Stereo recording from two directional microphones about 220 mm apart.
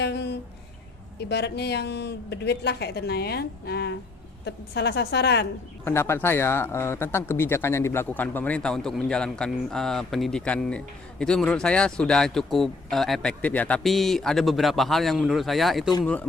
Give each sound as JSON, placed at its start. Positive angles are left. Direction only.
{"t": 0.0, "sound": "a sound", "side_deg": 50}
{"t": 1.2, "sound": "speech", "side_deg": 50}
{"t": 5.8, "sound": "speech", "side_deg": 10}